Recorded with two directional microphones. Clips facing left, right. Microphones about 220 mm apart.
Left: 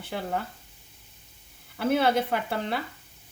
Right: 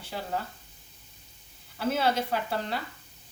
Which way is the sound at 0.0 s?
55° left (ahead or behind).